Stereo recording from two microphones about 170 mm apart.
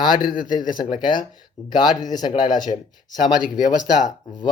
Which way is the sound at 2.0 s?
25° left (ahead or behind).